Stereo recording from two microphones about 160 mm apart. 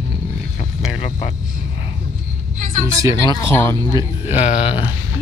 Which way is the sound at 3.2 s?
20° left (ahead or behind).